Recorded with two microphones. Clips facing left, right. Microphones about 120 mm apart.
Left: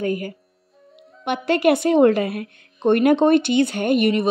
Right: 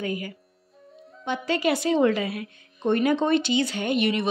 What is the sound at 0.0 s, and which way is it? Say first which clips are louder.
Speech: left 6 dB; 45° left (ahead or behind).